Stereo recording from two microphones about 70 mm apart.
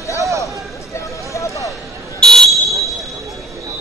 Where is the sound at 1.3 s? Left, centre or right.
Left.